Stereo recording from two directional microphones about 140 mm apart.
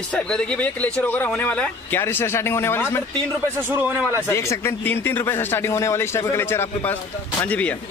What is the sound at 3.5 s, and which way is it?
Speech, 15° right (ahead or behind).